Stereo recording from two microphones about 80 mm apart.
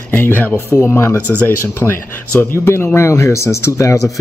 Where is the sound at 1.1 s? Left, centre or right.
Right.